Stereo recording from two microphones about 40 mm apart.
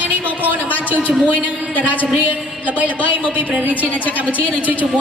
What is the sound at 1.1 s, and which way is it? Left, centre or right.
A woman's voice, right.